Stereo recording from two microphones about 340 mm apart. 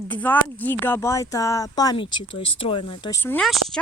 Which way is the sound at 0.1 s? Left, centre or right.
Centre.